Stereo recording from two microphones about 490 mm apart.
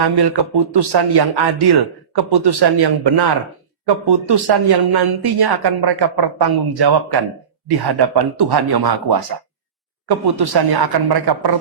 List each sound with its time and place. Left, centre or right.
0.0 s speech: right